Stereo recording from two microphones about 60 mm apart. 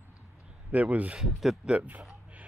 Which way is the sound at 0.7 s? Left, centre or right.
Right.